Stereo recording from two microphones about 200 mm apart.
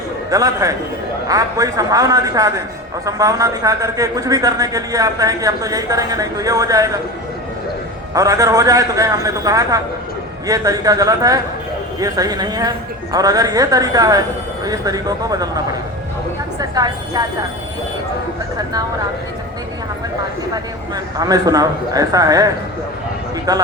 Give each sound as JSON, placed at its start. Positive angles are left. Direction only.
{"t": 0.3, "sound": "a man's voice", "side_deg": -15}
{"t": 8.1, "sound": "a man's voice", "side_deg": -15}
{"t": 16.6, "sound": "a woman's voice", "side_deg": -20}
{"t": 20.5, "sound": "a man's voice", "side_deg": -20}